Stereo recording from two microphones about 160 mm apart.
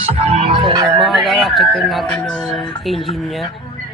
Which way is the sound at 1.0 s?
Centre (ahead or behind).